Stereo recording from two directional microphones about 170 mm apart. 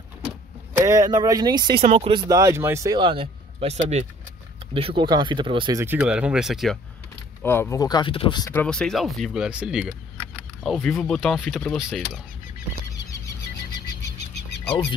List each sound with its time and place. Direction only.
0.8 s speech: 20° right (ahead or behind)
2.2 s speech: 20° right (ahead or behind)
5.8 s speech: 10° right (ahead or behind)
7.4 s speech: 15° left (ahead or behind); by 8.5 s 30° left (ahead or behind)
8.5 s speech: 10° left (ahead or behind)
12.9 s a sound: 20° left (ahead or behind)